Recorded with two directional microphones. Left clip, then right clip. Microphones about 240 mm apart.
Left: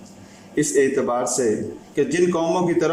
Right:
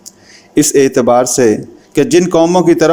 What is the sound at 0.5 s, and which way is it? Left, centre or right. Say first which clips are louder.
A man's voice: right 9 dB; right.